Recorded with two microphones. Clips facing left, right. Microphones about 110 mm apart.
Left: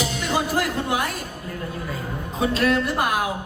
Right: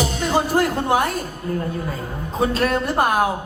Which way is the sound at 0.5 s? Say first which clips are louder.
Right 7 dB; 35° right (ahead or behind).